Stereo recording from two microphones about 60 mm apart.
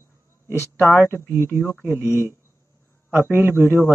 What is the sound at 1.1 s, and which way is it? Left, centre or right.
Speech, right.